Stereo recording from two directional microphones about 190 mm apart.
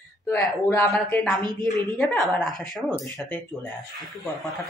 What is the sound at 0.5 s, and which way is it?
A woman's voice, 10° left (ahead or behind).